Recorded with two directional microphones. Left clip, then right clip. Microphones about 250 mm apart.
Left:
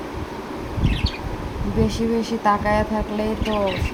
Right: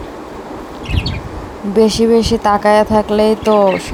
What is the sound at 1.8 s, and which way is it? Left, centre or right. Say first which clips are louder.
Speech: right 12 dB; right.